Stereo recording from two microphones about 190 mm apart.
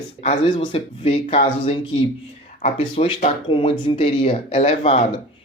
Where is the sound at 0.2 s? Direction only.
30° left (ahead or behind).